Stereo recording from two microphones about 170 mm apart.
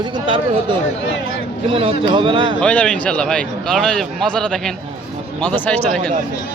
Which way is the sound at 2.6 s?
5° left (ahead or behind).